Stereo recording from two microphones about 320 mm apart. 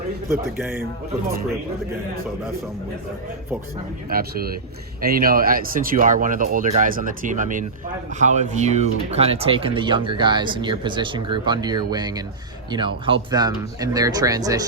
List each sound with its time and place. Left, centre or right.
0.3 s speech: centre
4.1 s speech: right; by 14.6 s centre